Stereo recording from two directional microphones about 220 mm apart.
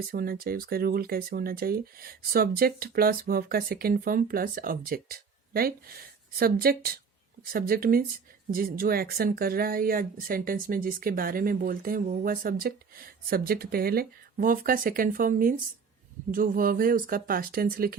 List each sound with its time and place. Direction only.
0.1 s speech: 45° right (ahead or behind)